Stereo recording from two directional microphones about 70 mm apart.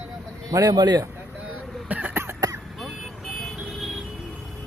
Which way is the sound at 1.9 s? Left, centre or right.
Right.